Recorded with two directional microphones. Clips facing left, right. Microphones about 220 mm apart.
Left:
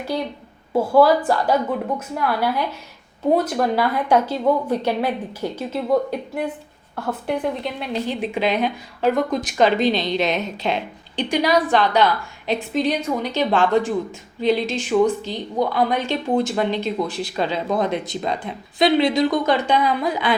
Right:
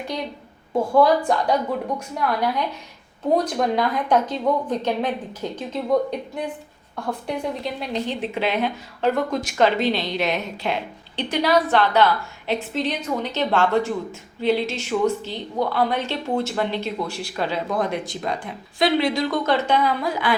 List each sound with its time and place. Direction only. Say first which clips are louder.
0.7 s a woman's voice: left 2 dB; 5° left (ahead or behind)